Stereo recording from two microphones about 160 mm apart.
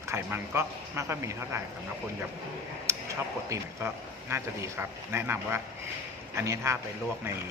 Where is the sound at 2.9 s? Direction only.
20° right (ahead or behind).